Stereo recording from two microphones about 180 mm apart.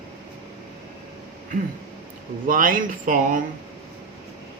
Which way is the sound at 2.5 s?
50° right (ahead or behind).